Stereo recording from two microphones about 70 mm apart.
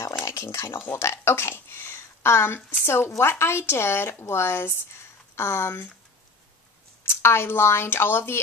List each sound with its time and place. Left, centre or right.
0.0 s speech: left
7.1 s speech: left